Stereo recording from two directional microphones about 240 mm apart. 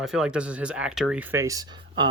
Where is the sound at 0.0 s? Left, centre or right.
Centre.